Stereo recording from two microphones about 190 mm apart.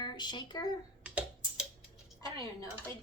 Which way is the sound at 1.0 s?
5° right (ahead or behind).